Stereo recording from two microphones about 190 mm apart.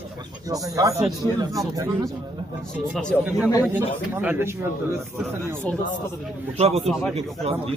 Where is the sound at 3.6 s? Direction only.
10° right (ahead or behind).